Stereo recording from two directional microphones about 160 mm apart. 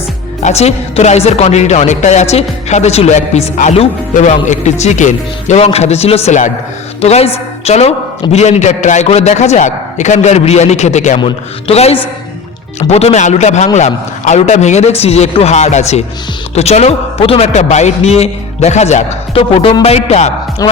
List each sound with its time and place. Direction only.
0.4 s speech: 40° left (ahead or behind)
20.6 s speech: 20° left (ahead or behind)